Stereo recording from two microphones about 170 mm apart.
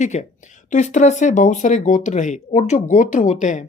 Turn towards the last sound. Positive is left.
turn(degrees=45)  # may be behind; listen again after turning